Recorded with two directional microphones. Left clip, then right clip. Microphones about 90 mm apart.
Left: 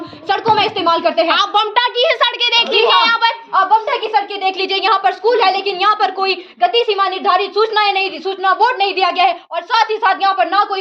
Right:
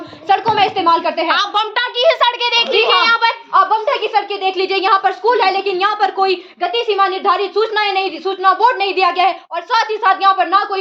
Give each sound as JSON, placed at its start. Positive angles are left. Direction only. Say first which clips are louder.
{"t": 0.3, "sound": "a woman's voice", "louder": "right 1 dB", "side_deg": -25}
{"t": 1.3, "sound": "a woman's voice", "louder": "left 2 dB", "side_deg": -15}
{"t": 4.5, "sound": "a woman's voice", "louder": "right 2 dB", "side_deg": -25}